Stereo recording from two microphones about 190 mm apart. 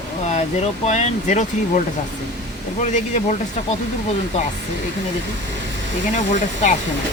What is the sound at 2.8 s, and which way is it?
Speech, 40° left (ahead or behind).